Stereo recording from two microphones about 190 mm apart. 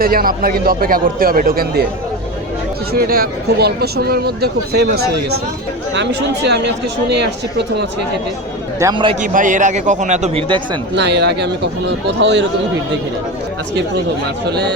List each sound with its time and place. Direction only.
0.0 s a man's voice: 50° right (ahead or behind)
2.9 s speech: 55° right (ahead or behind)
8.8 s a man's voice: 25° right (ahead or behind)
9.2 s speech: 45° right (ahead or behind); by 10.8 s 30° right (ahead or behind)
10.9 s speech: 65° right (ahead or behind)